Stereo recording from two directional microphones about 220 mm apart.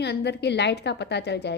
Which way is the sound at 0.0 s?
50° left (ahead or behind).